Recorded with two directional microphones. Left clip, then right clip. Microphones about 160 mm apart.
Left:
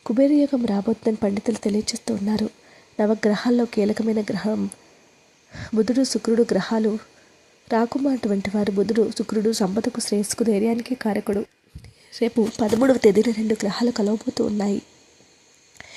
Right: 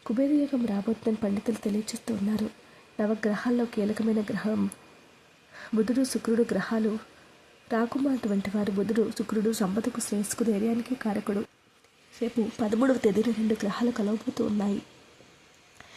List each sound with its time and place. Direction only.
0.0 s speech: 35° left (ahead or behind)
5.5 s speech: 30° left (ahead or behind)
12.2 s speech: 40° left (ahead or behind)